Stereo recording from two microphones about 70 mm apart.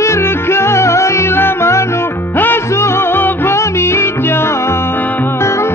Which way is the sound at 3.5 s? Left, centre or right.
Left.